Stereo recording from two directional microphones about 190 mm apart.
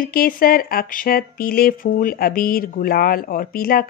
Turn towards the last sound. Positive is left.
turn(degrees=50)  # may be behind; listen again after turning